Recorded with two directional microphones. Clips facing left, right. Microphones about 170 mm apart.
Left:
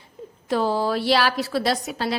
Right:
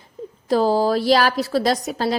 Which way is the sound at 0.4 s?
40° right (ahead or behind).